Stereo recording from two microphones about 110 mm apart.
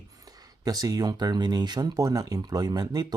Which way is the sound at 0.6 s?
35° right (ahead or behind).